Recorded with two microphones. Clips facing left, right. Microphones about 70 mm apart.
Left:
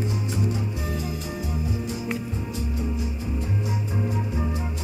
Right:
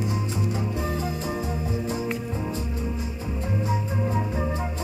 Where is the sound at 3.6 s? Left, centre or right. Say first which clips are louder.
Right 2 dB; right.